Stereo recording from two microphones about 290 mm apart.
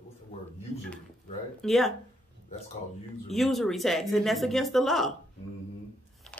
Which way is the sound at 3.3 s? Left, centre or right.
Centre.